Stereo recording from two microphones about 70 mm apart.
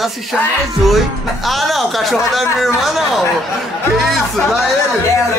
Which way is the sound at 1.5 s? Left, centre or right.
Centre.